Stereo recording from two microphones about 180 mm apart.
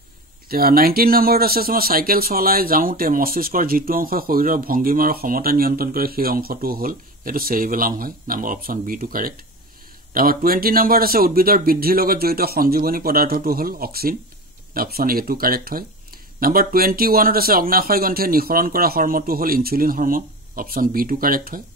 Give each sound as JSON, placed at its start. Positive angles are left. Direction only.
{"t": 0.5, "sound": "speech", "side_deg": -55}